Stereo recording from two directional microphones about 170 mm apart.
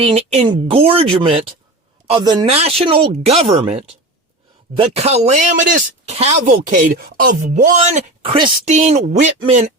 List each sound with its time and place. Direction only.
0.0 s speech: 35° right (ahead or behind)
4.8 s speech: 40° right (ahead or behind); by 7.3 s 55° right (ahead or behind)
7.4 s speech: 45° right (ahead or behind)
8.6 s speech: 40° right (ahead or behind)